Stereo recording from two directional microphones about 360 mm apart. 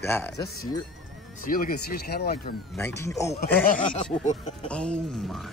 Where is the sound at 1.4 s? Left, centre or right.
Left.